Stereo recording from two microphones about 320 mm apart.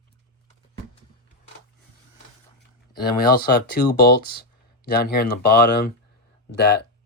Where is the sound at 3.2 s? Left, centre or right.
Left.